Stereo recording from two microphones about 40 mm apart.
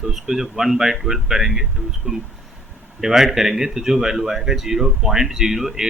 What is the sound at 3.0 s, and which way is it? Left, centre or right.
Speech, centre.